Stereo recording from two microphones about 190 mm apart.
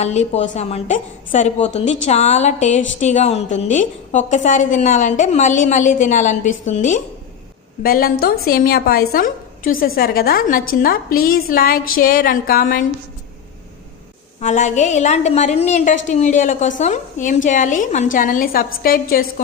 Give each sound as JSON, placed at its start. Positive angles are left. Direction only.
{"t": 0.0, "sound": "a woman's voice", "side_deg": 35}
{"t": 7.8, "sound": "a woman's voice", "side_deg": 50}
{"t": 14.4, "sound": "a woman's voice", "side_deg": 40}